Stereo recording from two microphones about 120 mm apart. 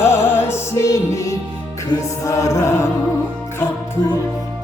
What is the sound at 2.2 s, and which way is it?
Mantra, 25° left (ahead or behind).